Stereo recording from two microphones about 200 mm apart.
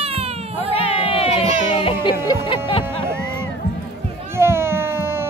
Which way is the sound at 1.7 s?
25° left (ahead or behind).